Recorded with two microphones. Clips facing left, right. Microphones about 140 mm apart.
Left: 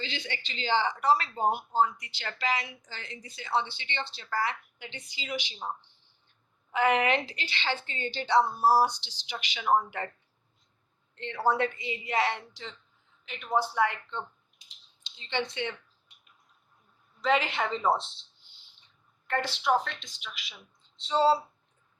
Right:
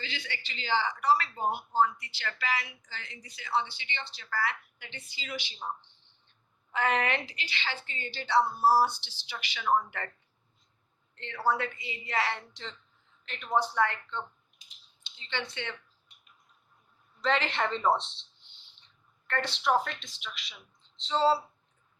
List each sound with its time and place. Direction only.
0.0 s a woman's voice: 25° left (ahead or behind)
6.7 s speech: 15° left (ahead or behind)
7.3 s a woman's voice: 30° left (ahead or behind)
11.1 s a woman's voice: 20° left (ahead or behind)
13.2 s speech: 5° left (ahead or behind)
17.2 s a woman's voice: 10° left (ahead or behind)
19.3 s a woman's voice: 5° left (ahead or behind)